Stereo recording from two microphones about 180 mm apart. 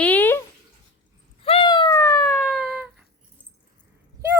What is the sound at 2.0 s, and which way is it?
Police car, 15° left (ahead or behind).